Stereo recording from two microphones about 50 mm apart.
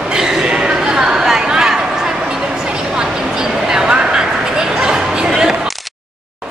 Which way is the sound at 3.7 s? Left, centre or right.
Centre.